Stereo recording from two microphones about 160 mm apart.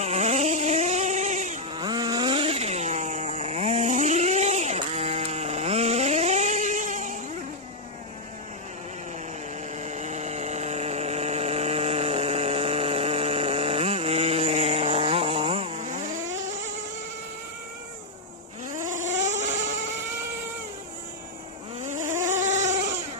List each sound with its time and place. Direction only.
0.0 s a sound: 45° right (ahead or behind)
1.7 s vehicle: 30° right (ahead or behind); by 7.2 s 50° right (ahead or behind)
9.8 s vehicle: 45° right (ahead or behind)
18.7 s vehicle: 55° right (ahead or behind)
21.8 s vehicle: 55° right (ahead or behind)
22.2 s a sound: 50° right (ahead or behind)